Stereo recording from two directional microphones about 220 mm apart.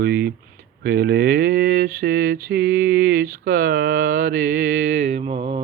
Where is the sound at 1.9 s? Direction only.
45° right (ahead or behind).